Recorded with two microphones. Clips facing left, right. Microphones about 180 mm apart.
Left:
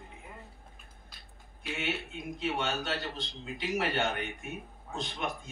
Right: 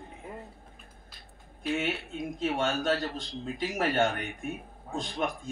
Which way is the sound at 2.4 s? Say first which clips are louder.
Right 4 dB; 45° right (ahead or behind).